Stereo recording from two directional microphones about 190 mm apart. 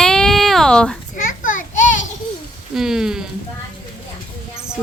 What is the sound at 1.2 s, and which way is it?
Children playing, 45° left (ahead or behind).